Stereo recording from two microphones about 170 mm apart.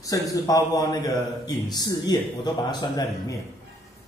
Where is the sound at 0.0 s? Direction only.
20° left (ahead or behind).